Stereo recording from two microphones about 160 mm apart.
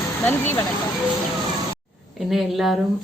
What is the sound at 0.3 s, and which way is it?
Speech, 15° left (ahead or behind).